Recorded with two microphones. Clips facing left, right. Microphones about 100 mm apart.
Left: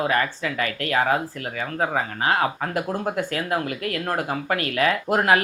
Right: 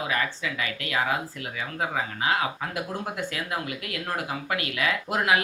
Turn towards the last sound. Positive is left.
turn(degrees=45)  # may be behind; listen again after turning